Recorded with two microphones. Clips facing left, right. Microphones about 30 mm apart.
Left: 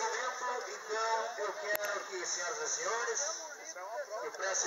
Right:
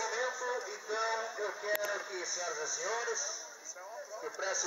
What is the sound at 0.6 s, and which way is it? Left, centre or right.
A man's voice, centre.